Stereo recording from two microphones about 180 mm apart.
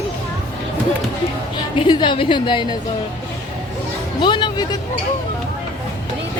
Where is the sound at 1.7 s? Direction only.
25° left (ahead or behind).